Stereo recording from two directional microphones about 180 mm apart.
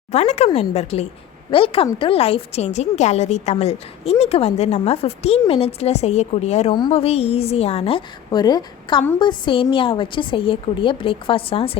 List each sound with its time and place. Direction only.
0.1 s a woman's voice: 40° left (ahead or behind)